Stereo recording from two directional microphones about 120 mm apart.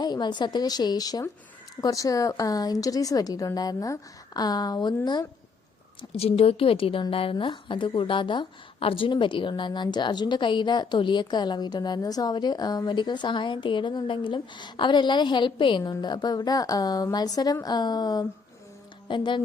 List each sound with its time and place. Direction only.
0.0 s a woman's voice: 35° left (ahead or behind)
6.0 s a woman's voice: 55° left (ahead or behind)